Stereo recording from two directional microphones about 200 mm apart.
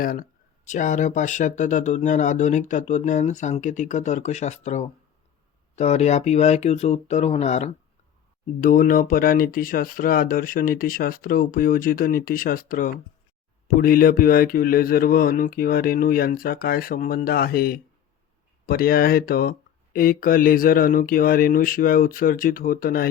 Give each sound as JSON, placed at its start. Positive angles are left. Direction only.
{"t": 0.0, "sound": "speech", "side_deg": 45}